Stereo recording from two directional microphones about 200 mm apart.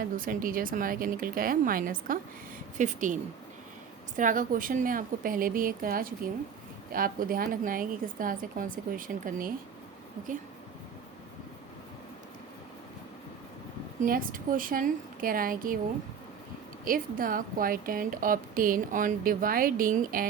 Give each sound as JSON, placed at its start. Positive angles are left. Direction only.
{"t": 0.0, "sound": "a woman's voice", "side_deg": -45}
{"t": 4.2, "sound": "a woman's voice", "side_deg": -40}
{"t": 14.0, "sound": "a woman's voice", "side_deg": -45}
{"t": 16.8, "sound": "a woman's voice", "side_deg": -45}